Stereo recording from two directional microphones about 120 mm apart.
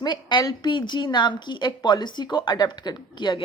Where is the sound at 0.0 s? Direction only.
40° left (ahead or behind).